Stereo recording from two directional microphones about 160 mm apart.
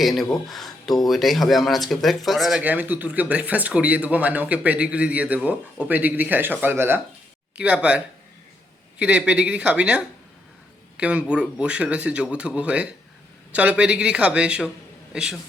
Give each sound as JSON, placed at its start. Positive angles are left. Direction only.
{"t": 0.0, "sound": "speech", "side_deg": 0}